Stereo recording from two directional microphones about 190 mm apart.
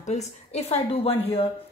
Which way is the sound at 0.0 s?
35° left (ahead or behind).